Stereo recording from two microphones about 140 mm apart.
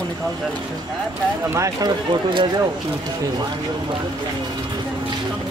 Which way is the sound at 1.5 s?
20° right (ahead or behind).